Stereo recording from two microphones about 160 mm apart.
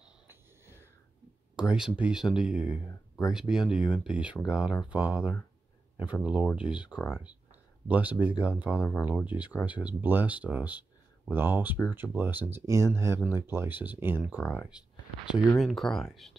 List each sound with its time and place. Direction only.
0.0 s a sound: 15° right (ahead or behind)
1.6 s speech: 5° right (ahead or behind)
7.9 s speech: 10° right (ahead or behind)